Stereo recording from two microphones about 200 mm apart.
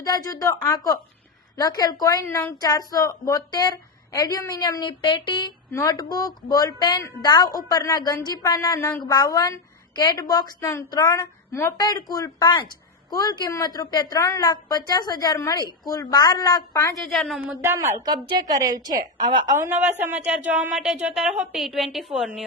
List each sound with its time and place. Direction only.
0.1 s a woman's voice: 15° left (ahead or behind)
17.1 s a woman's voice: centre (ahead or behind); by 19.5 s 20° right (ahead or behind)
20.0 s a woman's voice: 5° right (ahead or behind)